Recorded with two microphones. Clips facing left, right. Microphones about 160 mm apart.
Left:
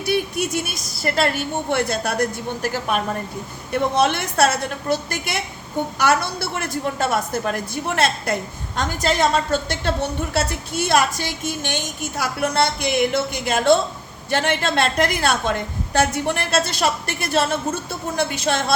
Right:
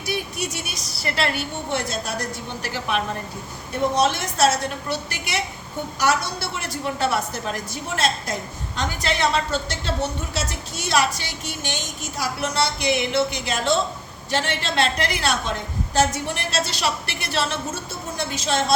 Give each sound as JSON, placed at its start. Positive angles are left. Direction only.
{"t": 0.0, "sound": "speech", "side_deg": 55}
{"t": 2.6, "sound": "speech", "side_deg": 45}
{"t": 3.9, "sound": "speech", "side_deg": 60}
{"t": 6.6, "sound": "speech", "side_deg": 50}
{"t": 18.2, "sound": "a woman's voice", "side_deg": 60}